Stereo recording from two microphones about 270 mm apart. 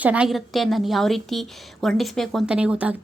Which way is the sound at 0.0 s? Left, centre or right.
Centre.